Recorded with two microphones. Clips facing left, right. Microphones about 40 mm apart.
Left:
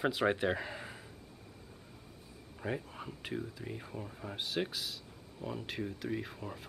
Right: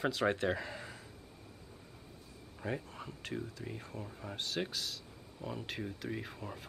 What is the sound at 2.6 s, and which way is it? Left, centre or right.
Speech, centre.